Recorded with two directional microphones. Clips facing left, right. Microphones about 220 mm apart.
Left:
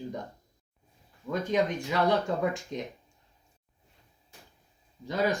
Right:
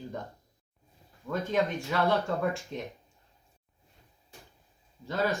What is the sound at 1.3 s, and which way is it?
Speech, 15° left (ahead or behind).